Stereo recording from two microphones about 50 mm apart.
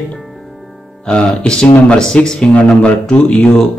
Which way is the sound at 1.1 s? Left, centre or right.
Centre.